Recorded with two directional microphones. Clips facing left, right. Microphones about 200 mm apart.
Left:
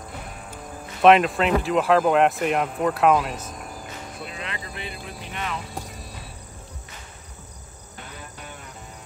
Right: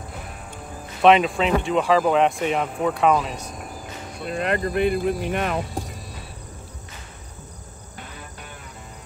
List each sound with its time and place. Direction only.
0.2 s music: centre (ahead or behind)
1.0 s speech: centre (ahead or behind)
4.3 s speech: 50° right (ahead or behind)
5.7 s cricket: centre (ahead or behind)